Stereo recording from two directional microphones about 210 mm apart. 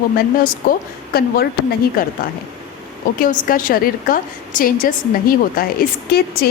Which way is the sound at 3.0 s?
40° left (ahead or behind).